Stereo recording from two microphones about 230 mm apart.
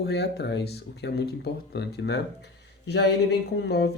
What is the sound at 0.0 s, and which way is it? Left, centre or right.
Speech, left.